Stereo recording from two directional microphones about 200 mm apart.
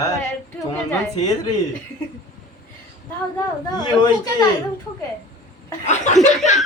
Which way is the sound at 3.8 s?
20° left (ahead or behind).